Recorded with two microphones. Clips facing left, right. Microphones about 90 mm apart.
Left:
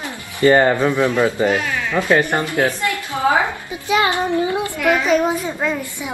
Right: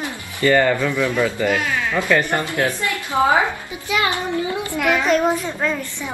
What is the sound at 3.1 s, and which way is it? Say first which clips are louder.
Speech: right 2 dB; 20° right (ahead or behind).